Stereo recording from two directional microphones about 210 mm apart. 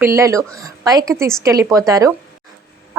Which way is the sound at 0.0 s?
15° right (ahead or behind).